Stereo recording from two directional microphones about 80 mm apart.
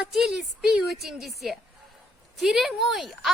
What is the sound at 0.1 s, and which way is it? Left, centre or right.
A woman's voice, centre.